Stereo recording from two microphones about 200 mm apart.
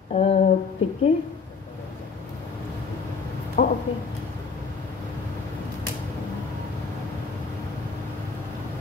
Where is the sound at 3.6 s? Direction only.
40° left (ahead or behind).